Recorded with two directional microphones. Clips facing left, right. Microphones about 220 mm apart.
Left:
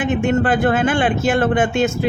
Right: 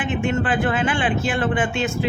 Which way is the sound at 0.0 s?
40° left (ahead or behind).